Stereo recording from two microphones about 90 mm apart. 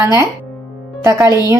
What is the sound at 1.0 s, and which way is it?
Speech, 25° right (ahead or behind).